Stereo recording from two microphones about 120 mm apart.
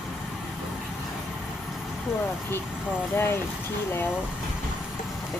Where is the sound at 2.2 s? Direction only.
15° left (ahead or behind).